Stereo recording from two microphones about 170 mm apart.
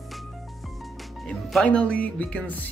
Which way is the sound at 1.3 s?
5° left (ahead or behind).